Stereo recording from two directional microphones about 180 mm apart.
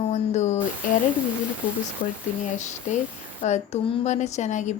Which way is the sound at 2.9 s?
45° left (ahead or behind).